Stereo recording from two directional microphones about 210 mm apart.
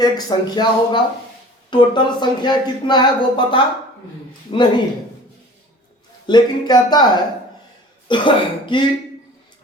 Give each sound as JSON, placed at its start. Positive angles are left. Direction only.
{"t": 0.0, "sound": "speech", "side_deg": 20}
{"t": 6.2, "sound": "speech", "side_deg": 20}